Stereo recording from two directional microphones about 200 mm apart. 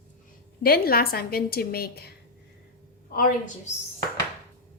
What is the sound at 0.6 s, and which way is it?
A woman's voice, 50° left (ahead or behind).